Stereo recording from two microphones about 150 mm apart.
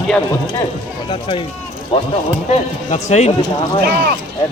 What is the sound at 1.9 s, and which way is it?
Speech, 35° left (ahead or behind).